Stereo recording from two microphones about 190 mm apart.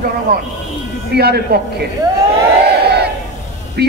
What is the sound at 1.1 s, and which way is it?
Speech, 55° right (ahead or behind).